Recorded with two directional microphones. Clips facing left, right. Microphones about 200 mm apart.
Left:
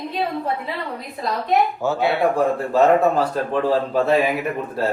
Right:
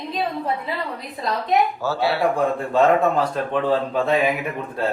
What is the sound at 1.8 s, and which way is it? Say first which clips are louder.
Speech: left 2 dB; 20° left (ahead or behind).